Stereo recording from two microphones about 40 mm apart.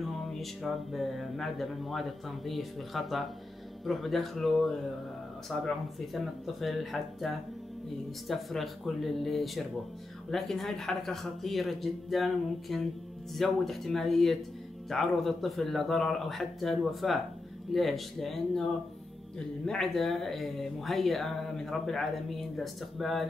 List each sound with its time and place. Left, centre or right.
0.0 s speech: centre
19.3 s speech: centre
19.9 s speech: centre